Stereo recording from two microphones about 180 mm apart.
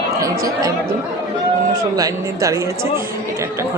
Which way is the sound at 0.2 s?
20° right (ahead or behind).